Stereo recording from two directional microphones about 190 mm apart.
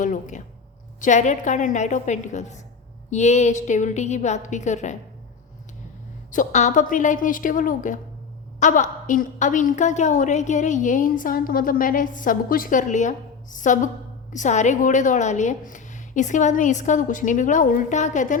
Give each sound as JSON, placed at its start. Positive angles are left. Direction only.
{"t": 0.0, "sound": "a woman's voice", "side_deg": 40}
{"t": 6.3, "sound": "a woman's voice", "side_deg": 40}